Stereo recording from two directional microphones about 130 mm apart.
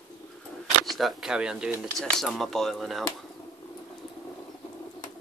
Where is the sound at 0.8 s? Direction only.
Centre (ahead or behind).